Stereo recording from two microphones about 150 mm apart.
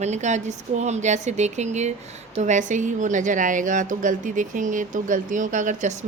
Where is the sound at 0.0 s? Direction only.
50° right (ahead or behind).